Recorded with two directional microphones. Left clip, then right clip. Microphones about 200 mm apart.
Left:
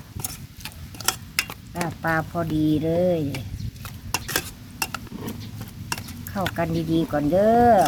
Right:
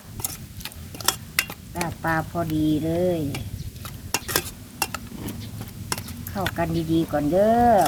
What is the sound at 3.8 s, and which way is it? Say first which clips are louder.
Stir: even; 15° left (ahead or behind).